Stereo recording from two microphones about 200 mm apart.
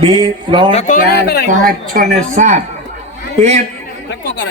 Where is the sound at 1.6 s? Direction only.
45° right (ahead or behind).